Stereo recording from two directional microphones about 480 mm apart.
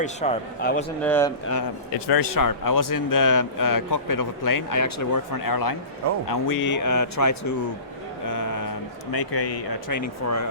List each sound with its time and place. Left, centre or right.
0.0 s speech: centre
1.0 s speech: centre
2.0 s a man's voice: left
8.3 s a sound: left
9.4 s a man's voice: left